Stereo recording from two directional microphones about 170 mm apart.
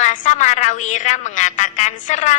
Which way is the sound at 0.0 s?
45° left (ahead or behind).